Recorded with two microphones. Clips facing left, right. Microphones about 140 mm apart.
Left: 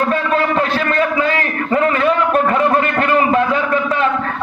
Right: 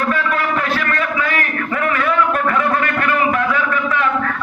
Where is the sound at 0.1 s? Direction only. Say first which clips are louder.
Left 3 dB; 25° left (ahead or behind).